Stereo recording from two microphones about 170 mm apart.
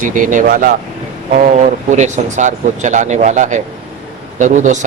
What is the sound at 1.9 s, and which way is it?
Speech, 45° right (ahead or behind).